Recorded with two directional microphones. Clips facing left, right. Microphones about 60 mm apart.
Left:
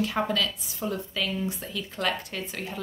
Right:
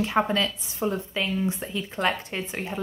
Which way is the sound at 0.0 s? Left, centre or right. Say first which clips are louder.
Right 3 dB; right.